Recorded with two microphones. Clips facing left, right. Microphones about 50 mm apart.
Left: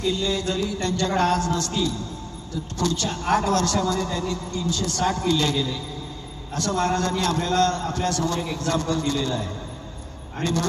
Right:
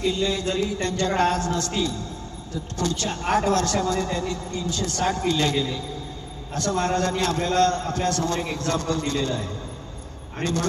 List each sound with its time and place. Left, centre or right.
0.0 s a man's voice: right